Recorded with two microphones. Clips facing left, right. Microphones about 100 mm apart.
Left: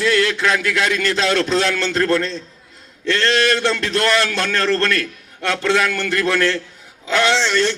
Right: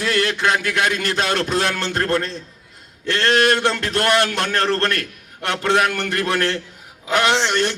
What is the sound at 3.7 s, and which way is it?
A man's voice, 30° right (ahead or behind).